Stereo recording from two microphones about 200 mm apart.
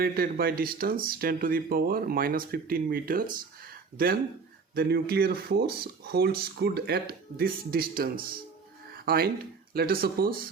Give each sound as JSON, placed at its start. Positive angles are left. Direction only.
{"t": 0.0, "sound": "speech", "side_deg": -50}